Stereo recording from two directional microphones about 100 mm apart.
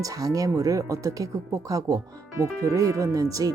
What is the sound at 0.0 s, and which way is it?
Speech, 35° right (ahead or behind).